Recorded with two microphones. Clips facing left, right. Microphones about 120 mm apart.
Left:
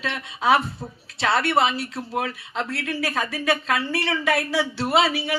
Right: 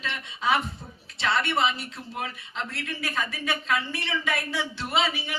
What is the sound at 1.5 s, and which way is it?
Speech, 40° left (ahead or behind).